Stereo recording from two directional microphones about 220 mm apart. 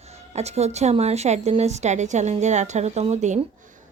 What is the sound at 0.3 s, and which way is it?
Speech, 30° right (ahead or behind).